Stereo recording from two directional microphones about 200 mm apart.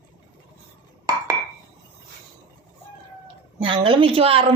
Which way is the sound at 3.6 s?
25° right (ahead or behind).